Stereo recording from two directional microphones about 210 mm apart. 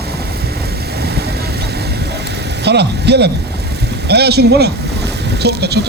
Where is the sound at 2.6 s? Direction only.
55° right (ahead or behind).